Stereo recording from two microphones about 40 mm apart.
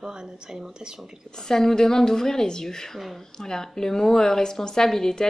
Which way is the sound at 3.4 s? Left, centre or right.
Centre.